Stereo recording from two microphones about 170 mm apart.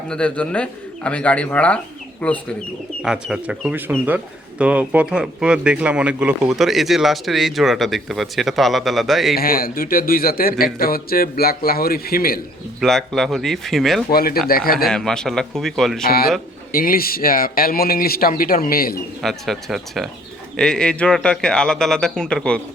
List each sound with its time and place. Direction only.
0.1 s speech: 5° left (ahead or behind)
9.3 s speech: 60° left (ahead or behind)
12.8 s speech: centre (ahead or behind)
14.1 s speech: 60° left (ahead or behind)
14.8 s speech: 5° left (ahead or behind)
16.0 s speech: 60° left (ahead or behind)
19.2 s speech: centre (ahead or behind)